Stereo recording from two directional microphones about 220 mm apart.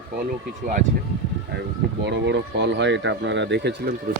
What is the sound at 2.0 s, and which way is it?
Speech, 50° right (ahead or behind).